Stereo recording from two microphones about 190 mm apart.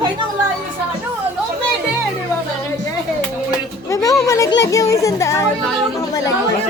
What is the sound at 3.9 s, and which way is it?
Music, 15° left (ahead or behind).